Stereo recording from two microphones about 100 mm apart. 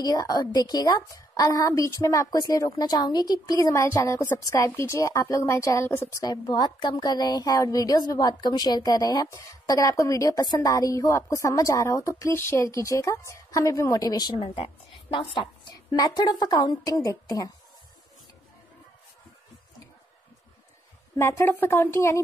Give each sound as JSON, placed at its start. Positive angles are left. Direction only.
{"t": 0.0, "sound": "a woman's voice", "side_deg": 40}
{"t": 6.5, "sound": "a woman's voice", "side_deg": 45}
{"t": 14.4, "sound": "speech", "side_deg": 65}
{"t": 15.1, "sound": "a woman's voice", "side_deg": 50}
{"t": 21.2, "sound": "a woman's voice", "side_deg": 25}